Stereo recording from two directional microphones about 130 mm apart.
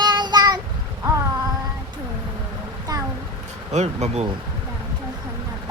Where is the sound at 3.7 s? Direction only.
60° right (ahead or behind).